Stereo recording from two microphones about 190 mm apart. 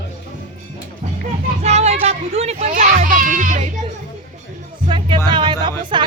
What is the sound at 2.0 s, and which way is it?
A child's voice, 35° right (ahead or behind).